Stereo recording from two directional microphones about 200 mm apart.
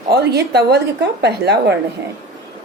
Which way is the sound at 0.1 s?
55° right (ahead or behind).